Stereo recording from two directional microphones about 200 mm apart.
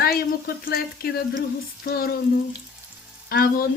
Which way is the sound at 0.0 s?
50° left (ahead or behind).